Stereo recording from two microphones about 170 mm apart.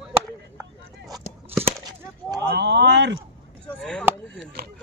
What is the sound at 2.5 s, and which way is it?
Speech, 90° right.